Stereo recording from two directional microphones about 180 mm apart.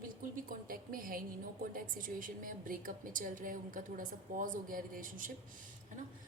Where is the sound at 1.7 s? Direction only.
50° right (ahead or behind).